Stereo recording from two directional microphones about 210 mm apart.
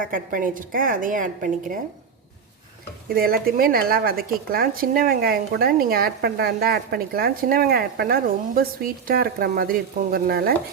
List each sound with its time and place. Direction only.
0.0 s a woman's voice: 40° right (ahead or behind)
3.2 s speech: 45° right (ahead or behind)